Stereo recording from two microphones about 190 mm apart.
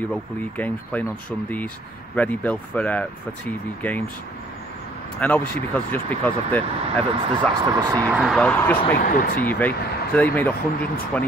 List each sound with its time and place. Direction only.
0.1 s speech: 10° left (ahead or behind)
2.1 s speech: 10° left (ahead or behind)
5.2 s speech: 10° left (ahead or behind)
7.7 s speech: 15° right (ahead or behind)
8.2 s speech: centre (ahead or behind)
9.0 s speech: 50° left (ahead or behind)
9.4 s speech: 10° left (ahead or behind)